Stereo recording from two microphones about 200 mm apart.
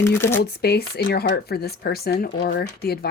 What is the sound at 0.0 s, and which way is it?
Speech, 10° left (ahead or behind).